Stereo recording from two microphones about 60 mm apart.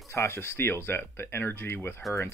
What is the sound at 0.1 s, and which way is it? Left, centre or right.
Speech, left.